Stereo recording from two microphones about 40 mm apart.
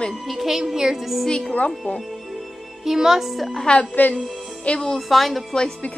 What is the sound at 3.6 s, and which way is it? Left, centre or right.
Speech, left.